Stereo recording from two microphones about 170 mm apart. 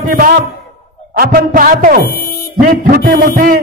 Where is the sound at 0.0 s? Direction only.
55° right (ahead or behind).